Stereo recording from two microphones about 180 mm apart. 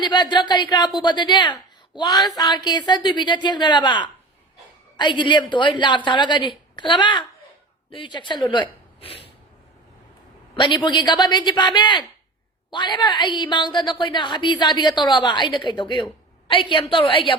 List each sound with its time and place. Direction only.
0.0 s a woman's voice: 25° left (ahead or behind)
10.5 s a woman's voice: 25° left (ahead or behind)